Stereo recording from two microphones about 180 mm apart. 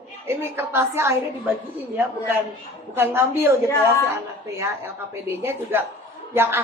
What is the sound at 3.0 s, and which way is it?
Speech, 15° right (ahead or behind).